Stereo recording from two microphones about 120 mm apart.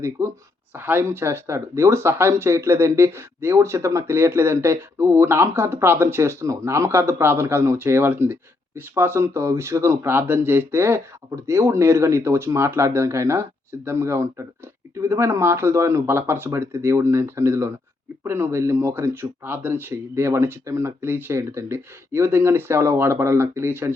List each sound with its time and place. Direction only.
0.0 s speech: 25° right (ahead or behind)